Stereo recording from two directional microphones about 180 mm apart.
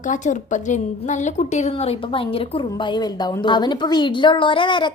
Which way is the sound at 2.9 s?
25° left (ahead or behind).